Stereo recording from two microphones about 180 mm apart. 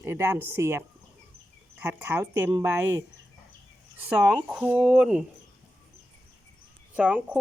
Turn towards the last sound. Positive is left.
turn(degrees=-5)  # may be behind; listen again after turning